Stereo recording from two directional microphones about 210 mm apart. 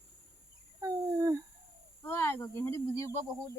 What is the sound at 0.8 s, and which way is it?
Speech, 15° right (ahead or behind).